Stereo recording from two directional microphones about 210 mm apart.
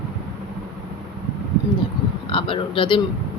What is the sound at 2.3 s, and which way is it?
Speech, 25° left (ahead or behind).